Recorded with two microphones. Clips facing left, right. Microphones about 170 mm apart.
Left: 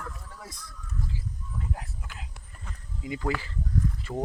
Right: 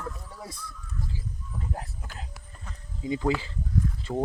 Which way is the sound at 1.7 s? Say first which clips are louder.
Right 2 dB; 40° right (ahead or behind).